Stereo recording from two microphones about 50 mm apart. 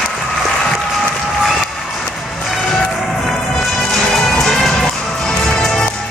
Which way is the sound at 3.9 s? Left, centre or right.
Centre.